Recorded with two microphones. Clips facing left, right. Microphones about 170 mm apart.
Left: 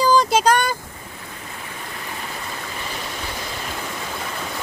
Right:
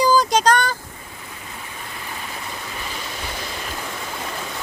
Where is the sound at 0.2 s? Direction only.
5° left (ahead or behind).